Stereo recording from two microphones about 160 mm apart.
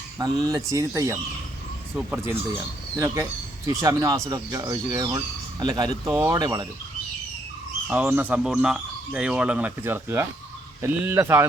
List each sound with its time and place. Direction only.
0.2 s speech: 25° right (ahead or behind)
7.9 s speech: 10° right (ahead or behind)